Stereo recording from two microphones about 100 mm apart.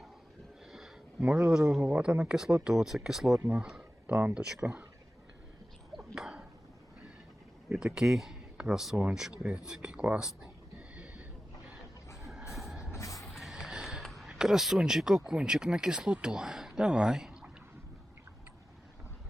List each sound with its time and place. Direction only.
1.2 s speech: 10° right (ahead or behind)
6.1 s a sound: 5° right (ahead or behind)
7.7 s speech: 10° right (ahead or behind)
10.9 s a sound: 10° right (ahead or behind)
12.1 s vehicle: centre (ahead or behind)
12.9 s music: 30° left (ahead or behind)
13.1 s music: centre (ahead or behind)
14.0 s speech: centre (ahead or behind)